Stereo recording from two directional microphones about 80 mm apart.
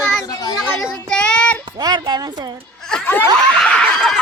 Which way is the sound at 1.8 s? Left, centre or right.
Right.